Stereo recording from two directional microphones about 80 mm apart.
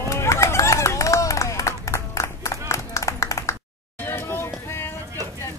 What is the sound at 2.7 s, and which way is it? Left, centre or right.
Clapping, left.